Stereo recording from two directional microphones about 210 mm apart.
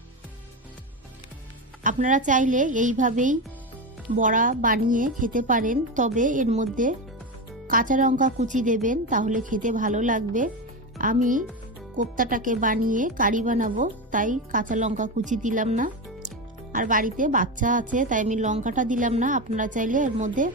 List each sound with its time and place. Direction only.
1.8 s speech: 40° right (ahead or behind)